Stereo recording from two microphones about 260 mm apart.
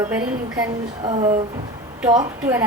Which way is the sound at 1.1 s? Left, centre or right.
Right.